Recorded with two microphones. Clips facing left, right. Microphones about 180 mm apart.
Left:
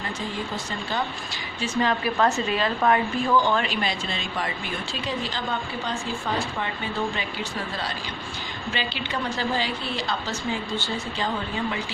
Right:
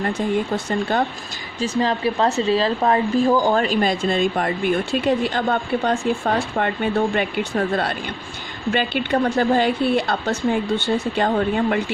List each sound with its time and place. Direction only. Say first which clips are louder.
0.0 s speech: right 10 dB; 55° right (ahead or behind)
1.5 s a woman's voice: right 4 dB; 35° right (ahead or behind)
3.2 s speech: right 5 dB; 40° right (ahead or behind)